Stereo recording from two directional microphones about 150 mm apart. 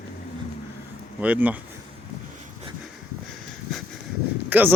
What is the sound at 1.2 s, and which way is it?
Speech, 10° right (ahead or behind).